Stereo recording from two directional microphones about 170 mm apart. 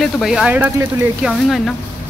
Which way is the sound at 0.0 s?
Centre (ahead or behind).